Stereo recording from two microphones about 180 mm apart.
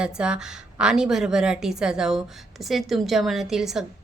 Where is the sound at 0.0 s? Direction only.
5° right (ahead or behind).